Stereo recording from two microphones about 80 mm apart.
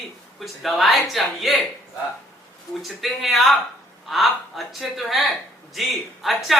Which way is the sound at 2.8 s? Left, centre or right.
Centre.